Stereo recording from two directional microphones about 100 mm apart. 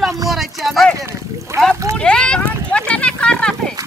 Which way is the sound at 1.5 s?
25° right (ahead or behind).